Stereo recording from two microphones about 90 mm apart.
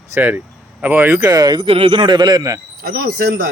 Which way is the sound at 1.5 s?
90° right.